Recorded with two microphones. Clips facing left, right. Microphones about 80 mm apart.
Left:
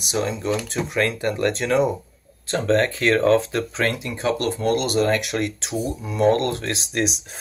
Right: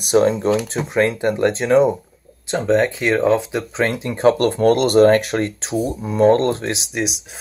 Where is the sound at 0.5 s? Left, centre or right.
Right.